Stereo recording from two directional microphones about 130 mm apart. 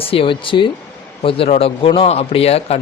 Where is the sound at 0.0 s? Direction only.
45° left (ahead or behind).